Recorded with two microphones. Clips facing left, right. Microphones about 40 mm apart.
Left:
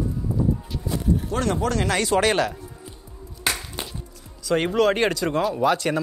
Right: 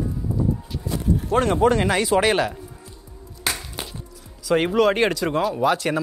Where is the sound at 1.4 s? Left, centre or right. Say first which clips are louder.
Right 6 dB; right.